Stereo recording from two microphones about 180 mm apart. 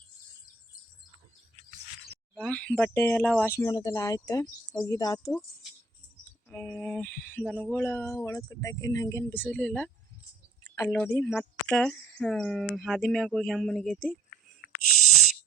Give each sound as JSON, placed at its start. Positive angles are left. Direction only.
{"t": 2.3, "sound": "speech", "side_deg": 5}
{"t": 6.5, "sound": "speech", "side_deg": 10}